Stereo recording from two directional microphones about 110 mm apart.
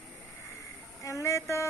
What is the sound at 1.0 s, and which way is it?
Speech, 30° left (ahead or behind).